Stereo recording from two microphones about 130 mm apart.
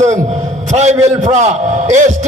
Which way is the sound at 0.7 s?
60° right (ahead or behind).